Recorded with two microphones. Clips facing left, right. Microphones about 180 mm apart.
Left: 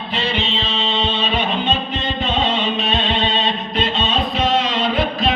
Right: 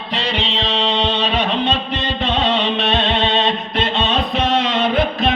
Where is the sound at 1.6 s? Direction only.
75° right (ahead or behind).